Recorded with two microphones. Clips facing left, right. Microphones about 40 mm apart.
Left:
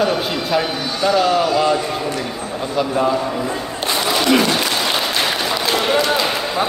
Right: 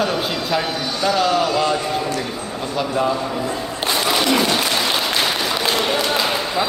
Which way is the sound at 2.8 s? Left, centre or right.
Centre.